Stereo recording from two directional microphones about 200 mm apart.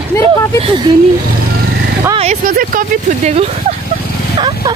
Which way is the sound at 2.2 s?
35° right (ahead or behind).